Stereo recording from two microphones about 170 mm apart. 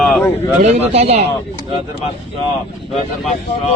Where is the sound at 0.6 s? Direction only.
40° right (ahead or behind).